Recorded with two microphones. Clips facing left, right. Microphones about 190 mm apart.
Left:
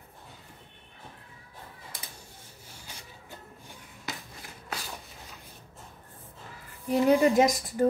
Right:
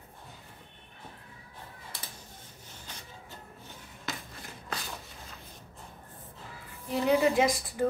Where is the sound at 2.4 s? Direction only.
10° left (ahead or behind).